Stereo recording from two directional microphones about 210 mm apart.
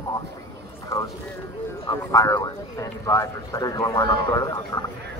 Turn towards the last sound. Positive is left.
turn(degrees=20)  # may be behind; listen again after turning